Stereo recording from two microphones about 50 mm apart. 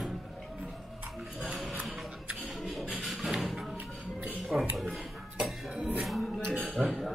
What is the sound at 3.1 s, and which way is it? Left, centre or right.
Music, centre.